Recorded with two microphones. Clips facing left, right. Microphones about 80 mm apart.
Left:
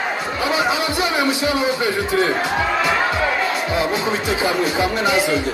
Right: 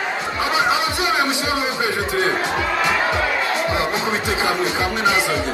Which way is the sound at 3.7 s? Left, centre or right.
Right.